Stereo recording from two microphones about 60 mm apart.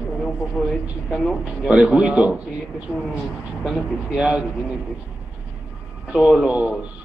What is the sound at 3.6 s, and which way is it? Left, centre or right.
Speech, centre.